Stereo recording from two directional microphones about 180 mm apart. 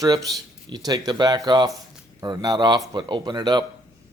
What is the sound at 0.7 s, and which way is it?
Speech, 20° right (ahead or behind).